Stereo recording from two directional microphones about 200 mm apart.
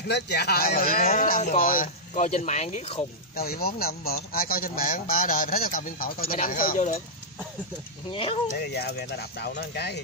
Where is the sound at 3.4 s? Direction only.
50° left (ahead or behind).